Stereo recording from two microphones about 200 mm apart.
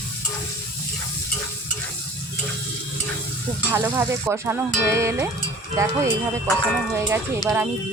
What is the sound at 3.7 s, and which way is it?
Speech, 10° right (ahead or behind).